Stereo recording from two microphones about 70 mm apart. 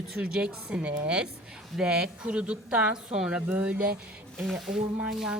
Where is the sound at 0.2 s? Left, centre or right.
Centre.